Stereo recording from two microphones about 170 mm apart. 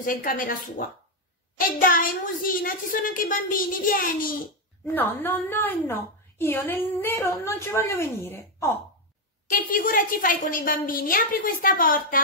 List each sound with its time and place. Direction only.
0.0 s a woman's voice: 55° left (ahead or behind)
4.8 s a woman's voice: 10° left (ahead or behind)
9.5 s a woman's voice: 55° left (ahead or behind)